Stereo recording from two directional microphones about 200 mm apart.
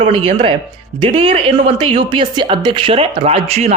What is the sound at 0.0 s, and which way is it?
Speech, 25° right (ahead or behind).